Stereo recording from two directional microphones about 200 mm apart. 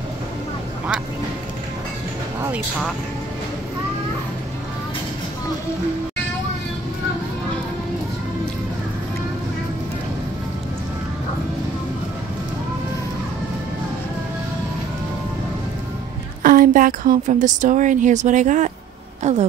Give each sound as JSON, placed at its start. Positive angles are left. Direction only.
{"t": 16.4, "sound": "a woman's voice", "side_deg": -45}